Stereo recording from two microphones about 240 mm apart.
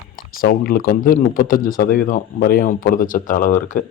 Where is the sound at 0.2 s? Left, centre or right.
Left.